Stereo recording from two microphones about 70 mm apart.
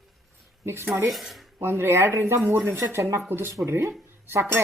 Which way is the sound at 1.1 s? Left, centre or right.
Centre.